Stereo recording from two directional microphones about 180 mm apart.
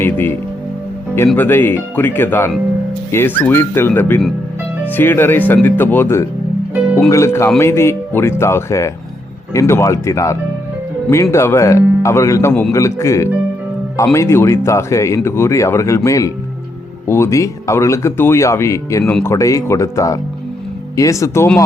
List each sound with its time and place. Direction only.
0.0 s speech: 10° left (ahead or behind)